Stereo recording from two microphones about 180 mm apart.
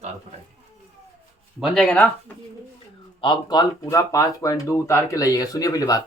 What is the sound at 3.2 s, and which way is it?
Speech, 25° left (ahead or behind).